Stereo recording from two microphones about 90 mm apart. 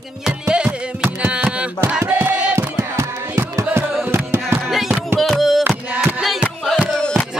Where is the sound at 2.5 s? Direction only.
30° right (ahead or behind).